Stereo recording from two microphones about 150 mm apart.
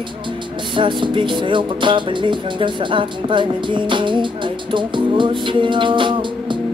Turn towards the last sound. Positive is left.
turn(degrees=-35)  # may be behind; listen again after turning